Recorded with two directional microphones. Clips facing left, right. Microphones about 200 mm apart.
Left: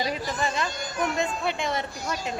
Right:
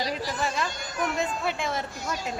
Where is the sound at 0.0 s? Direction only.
Centre (ahead or behind).